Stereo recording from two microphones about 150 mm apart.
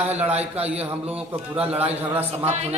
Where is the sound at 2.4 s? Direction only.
45° right (ahead or behind).